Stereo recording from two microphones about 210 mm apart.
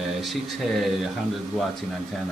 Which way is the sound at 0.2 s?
Centre (ahead or behind).